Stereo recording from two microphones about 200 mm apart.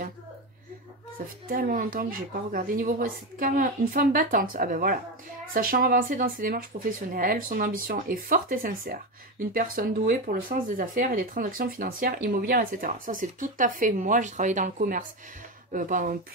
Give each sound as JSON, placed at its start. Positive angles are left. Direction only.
{"t": 1.5, "sound": "speech", "side_deg": -45}